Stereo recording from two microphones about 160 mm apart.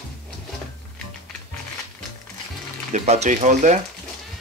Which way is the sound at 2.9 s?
45° right (ahead or behind).